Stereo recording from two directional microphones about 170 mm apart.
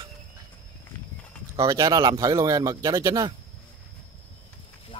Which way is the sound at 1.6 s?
20° right (ahead or behind).